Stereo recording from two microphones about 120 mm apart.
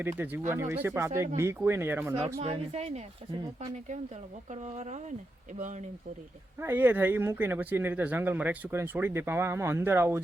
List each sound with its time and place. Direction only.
0.0 s speech: 15° right (ahead or behind)
2.1 s a woman's voice: 55° right (ahead or behind)
4.5 s speech: 65° right (ahead or behind)
5.5 s speech: 90° right
6.6 s speech: 20° right (ahead or behind)